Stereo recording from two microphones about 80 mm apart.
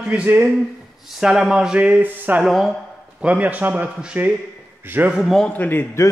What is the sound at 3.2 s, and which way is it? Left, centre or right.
Speech, centre.